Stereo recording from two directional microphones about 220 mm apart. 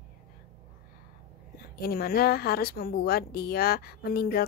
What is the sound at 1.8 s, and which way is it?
A woman's voice, 45° left (ahead or behind).